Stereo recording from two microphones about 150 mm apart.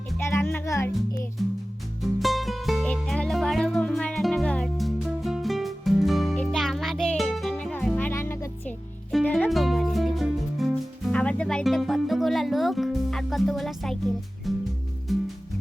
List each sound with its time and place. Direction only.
0.2 s music: 15° left (ahead or behind)
2.0 s music: centre (ahead or behind)
9.5 s music: centre (ahead or behind)